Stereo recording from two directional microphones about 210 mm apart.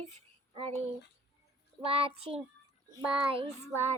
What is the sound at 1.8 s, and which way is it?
Child singing, 25° right (ahead or behind).